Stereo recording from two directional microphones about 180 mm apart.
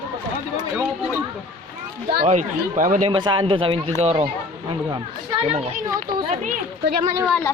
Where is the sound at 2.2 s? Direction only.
40° right (ahead or behind).